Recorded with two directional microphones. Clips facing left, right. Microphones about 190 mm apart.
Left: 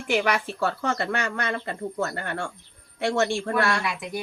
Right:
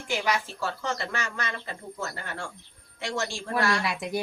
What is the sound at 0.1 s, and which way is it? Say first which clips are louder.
Speech: left 4 dB; 65° left (ahead or behind).